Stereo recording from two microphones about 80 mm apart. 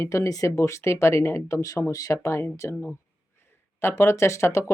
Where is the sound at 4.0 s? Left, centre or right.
Left.